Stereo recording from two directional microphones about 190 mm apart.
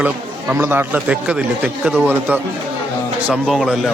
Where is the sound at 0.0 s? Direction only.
10° right (ahead or behind).